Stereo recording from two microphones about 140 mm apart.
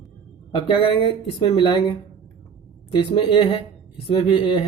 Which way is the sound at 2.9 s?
35° left (ahead or behind).